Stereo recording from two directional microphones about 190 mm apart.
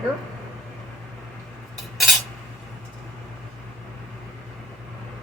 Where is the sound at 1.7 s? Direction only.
Centre (ahead or behind).